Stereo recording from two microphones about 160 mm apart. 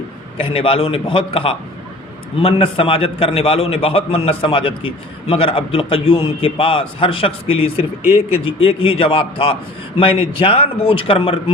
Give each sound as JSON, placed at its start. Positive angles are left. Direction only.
{"t": 0.3, "sound": "a man's voice", "side_deg": 35}